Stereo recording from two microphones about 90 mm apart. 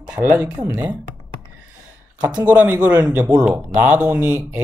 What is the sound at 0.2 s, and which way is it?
Speech, 20° right (ahead or behind).